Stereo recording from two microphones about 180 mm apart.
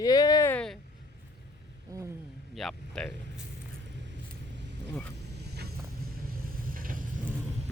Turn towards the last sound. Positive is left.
turn(degrees=-50)  # may be behind; listen again after turning